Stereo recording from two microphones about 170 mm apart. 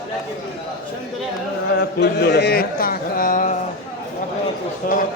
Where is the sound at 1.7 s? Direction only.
75° left (ahead or behind); by 3.5 s 50° left (ahead or behind).